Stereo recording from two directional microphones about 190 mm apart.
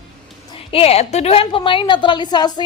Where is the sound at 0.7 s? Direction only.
30° left (ahead or behind).